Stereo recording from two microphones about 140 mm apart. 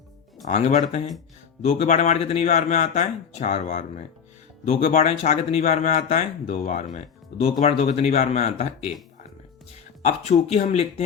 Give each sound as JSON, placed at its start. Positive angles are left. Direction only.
{"t": 0.4, "sound": "speech", "side_deg": 55}
{"t": 10.0, "sound": "speech", "side_deg": 55}